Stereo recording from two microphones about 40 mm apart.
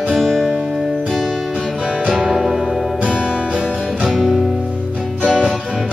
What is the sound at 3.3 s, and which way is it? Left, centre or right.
Music, right.